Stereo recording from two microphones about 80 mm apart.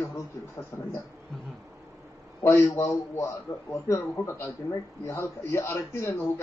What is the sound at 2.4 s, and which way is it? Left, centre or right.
A man's voice, left.